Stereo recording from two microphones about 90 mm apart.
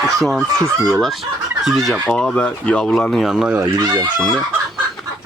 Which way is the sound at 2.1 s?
10° left (ahead or behind).